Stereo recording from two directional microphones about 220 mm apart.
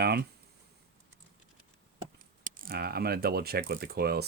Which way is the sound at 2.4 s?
40° right (ahead or behind).